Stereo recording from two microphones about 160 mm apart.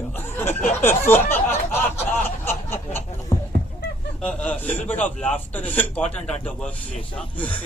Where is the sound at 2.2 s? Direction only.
15° left (ahead or behind).